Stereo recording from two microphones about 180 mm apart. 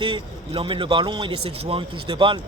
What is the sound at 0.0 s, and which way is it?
Speech, 25° right (ahead or behind).